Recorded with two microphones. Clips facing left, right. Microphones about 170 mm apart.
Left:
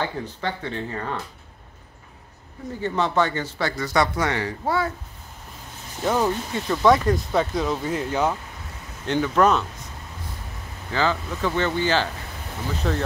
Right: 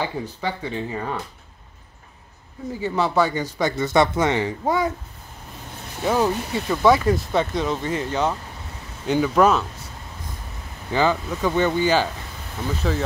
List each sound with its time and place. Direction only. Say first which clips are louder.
0.0 s speech: right 1 dB; 10° right (ahead or behind)
2.7 s speech: right 1 dB; 10° right (ahead or behind)
6.0 s speech: right 1 dB; 10° right (ahead or behind); by 8.4 s 5° left (ahead or behind)
9.0 s speech: right 2 dB; 10° right (ahead or behind)
10.9 s speech: right 3 dB; 15° right (ahead or behind)
12.8 s speech: right 1 dB; centre (ahead or behind)